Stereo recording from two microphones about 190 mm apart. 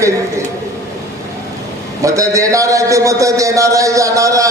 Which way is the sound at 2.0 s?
15° right (ahead or behind).